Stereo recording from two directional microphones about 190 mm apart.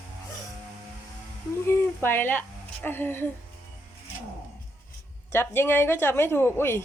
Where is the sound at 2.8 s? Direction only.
10° left (ahead or behind).